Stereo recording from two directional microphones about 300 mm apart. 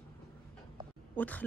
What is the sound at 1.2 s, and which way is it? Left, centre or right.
Speech, centre.